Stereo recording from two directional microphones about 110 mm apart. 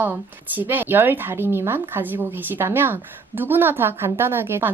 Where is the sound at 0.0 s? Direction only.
15° right (ahead or behind).